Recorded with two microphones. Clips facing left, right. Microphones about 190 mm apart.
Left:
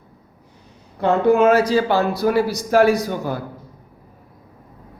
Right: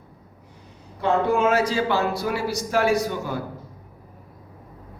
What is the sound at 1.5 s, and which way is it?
A man's voice, 35° left (ahead or behind).